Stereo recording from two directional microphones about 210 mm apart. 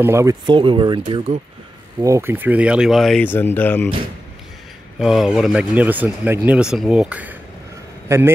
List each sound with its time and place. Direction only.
0.0 s speech: 15° right (ahead or behind)
2.0 s speech: 15° right (ahead or behind); by 3.9 s 10° left (ahead or behind)
4.9 s a man's voice: centre (ahead or behind)